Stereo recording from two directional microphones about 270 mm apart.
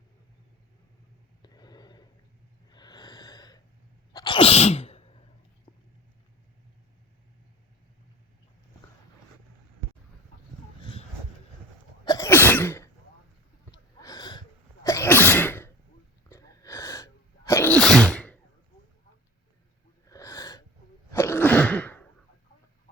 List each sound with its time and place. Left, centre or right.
1.4 s a sound: centre
2.6 s snort: centre
4.1 s sneeze: centre
12.0 s sneeze: centre
13.7 s a sound: centre
14.8 s sneeze: centre
20.1 s gasp: centre
21.1 s sneeze: centre